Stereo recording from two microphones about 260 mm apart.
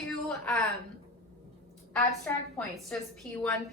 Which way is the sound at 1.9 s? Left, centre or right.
Centre.